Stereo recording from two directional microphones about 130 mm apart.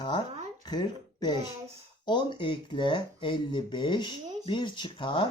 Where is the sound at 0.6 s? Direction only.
35° left (ahead or behind).